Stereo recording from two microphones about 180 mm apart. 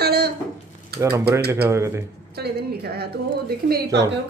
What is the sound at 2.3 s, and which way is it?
A woman's voice, 60° right (ahead or behind).